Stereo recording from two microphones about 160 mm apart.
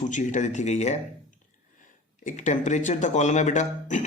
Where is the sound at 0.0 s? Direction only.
50° left (ahead or behind).